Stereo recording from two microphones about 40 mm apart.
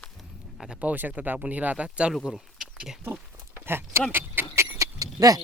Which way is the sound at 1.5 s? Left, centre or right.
Right.